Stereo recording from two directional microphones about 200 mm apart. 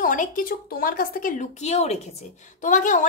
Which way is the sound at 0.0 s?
40° left (ahead or behind).